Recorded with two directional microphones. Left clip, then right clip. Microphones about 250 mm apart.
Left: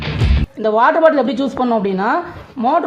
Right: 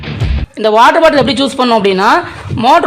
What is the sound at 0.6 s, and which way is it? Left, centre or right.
Speech, right.